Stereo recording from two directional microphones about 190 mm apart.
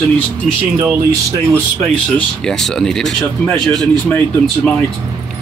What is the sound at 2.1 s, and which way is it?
Speech, 5° left (ahead or behind).